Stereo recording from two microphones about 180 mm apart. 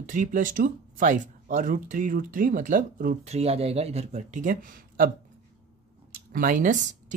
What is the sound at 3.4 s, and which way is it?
A man's voice, 35° right (ahead or behind).